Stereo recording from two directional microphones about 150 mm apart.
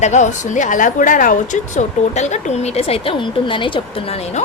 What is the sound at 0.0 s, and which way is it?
Speech, 50° left (ahead or behind).